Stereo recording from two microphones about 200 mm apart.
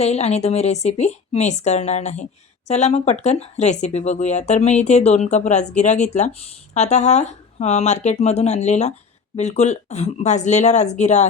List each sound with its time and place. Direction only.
0.0 s speech: 30° left (ahead or behind)